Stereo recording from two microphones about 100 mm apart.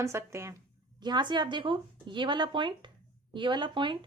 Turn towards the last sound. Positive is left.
turn(degrees=-50)  # may be behind; listen again after turning